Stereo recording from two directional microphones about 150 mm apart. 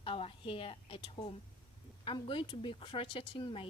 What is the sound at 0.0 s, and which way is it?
Speech, 35° left (ahead or behind).